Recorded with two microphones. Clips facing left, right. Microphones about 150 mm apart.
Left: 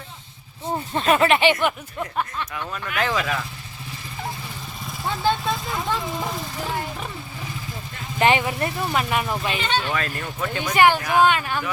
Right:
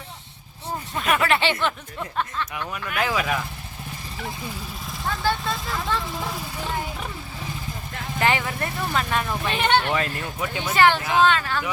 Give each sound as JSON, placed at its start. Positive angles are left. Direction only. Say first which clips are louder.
{"t": 0.9, "sound": "speech", "louder": "left 4 dB", "side_deg": 25}
{"t": 2.6, "sound": "speech", "louder": "left 1 dB", "side_deg": -10}
{"t": 5.0, "sound": "speech", "louder": "left 3 dB", "side_deg": 20}
{"t": 6.6, "sound": "speech", "louder": "even", "side_deg": 5}
{"t": 8.2, "sound": "speech", "louder": "left 4 dB", "side_deg": 20}
{"t": 9.6, "sound": "speech", "louder": "right 4 dB", "side_deg": -65}
{"t": 9.9, "sound": "speech", "louder": "right 1 dB", "side_deg": -15}
{"t": 10.8, "sound": "speech", "louder": "left 1 dB", "side_deg": 10}